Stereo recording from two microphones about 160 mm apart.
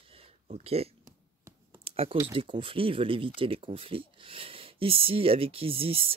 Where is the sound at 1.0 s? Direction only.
15° right (ahead or behind).